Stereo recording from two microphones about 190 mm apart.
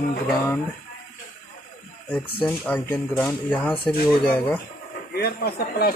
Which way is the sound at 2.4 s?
10° left (ahead or behind).